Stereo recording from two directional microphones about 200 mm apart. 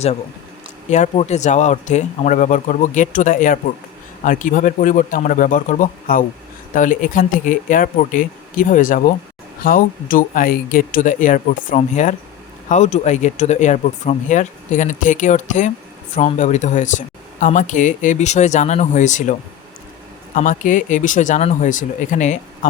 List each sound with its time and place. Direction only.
0.9 s speech: 35° left (ahead or behind)